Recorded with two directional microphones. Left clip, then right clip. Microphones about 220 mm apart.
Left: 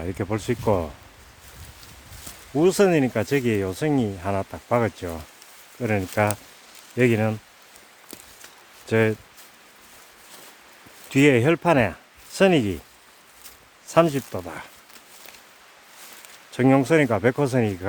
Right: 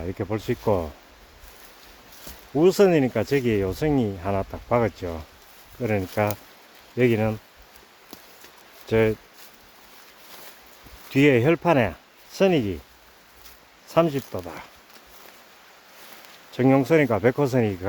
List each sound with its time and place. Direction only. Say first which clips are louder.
0.0 s speech: left 1 dB; 15° left (ahead or behind)
2.6 s speech: right 1 dB; 5° left (ahead or behind)
8.9 s speech: even; 10° left (ahead or behind)
11.1 s speech: left 1 dB; 10° left (ahead or behind)
13.8 s speech: left 2 dB; 15° left (ahead or behind)
16.5 s speech: even; 10° left (ahead or behind)